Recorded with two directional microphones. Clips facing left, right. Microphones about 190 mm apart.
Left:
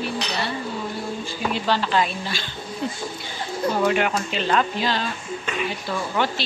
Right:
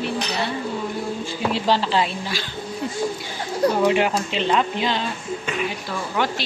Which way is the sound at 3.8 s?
25° right (ahead or behind).